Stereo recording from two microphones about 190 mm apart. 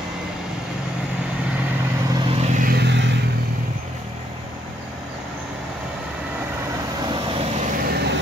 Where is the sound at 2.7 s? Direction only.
65° right (ahead or behind).